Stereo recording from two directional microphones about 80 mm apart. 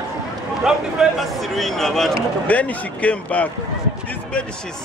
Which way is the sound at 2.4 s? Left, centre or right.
Centre.